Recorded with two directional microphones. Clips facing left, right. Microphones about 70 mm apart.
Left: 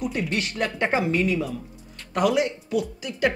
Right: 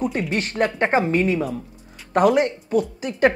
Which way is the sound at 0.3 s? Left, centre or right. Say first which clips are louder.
Right 5 dB; right.